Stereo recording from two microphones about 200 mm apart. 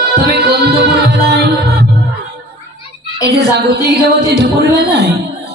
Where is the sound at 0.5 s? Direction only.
55° right (ahead or behind).